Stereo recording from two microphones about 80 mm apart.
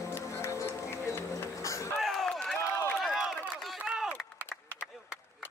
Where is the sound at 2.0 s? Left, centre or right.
Centre.